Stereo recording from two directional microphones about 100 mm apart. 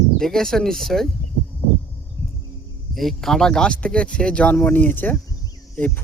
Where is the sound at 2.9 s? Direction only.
Centre (ahead or behind).